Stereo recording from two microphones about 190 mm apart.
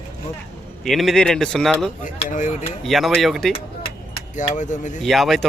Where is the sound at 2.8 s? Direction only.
Centre (ahead or behind).